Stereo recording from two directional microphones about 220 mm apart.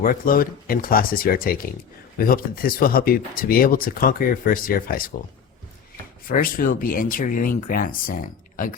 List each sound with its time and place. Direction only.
0.0 s speech: 40° left (ahead or behind)
6.2 s speech: 40° left (ahead or behind)